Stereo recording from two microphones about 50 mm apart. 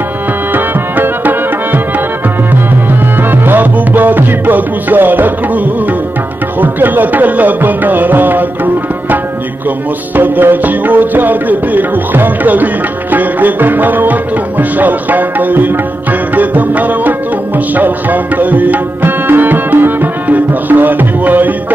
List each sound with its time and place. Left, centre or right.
0.5 s music: right
3.2 s music: right
10.1 s music: right
17.7 s tabla: right